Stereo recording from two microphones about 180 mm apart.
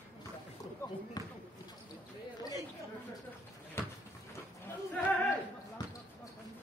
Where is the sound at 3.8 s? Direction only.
15° left (ahead or behind).